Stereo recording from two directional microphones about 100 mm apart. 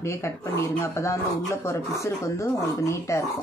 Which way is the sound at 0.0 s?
30° left (ahead or behind).